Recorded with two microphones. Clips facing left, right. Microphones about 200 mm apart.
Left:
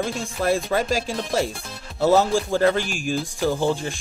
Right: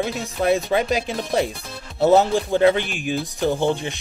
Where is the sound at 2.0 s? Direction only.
20° right (ahead or behind).